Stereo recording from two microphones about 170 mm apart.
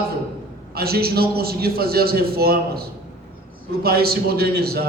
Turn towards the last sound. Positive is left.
turn(degrees=-65)  # may be behind; listen again after turning